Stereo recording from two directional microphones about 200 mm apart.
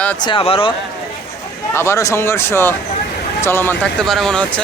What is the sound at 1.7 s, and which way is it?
Speech, 15° left (ahead or behind).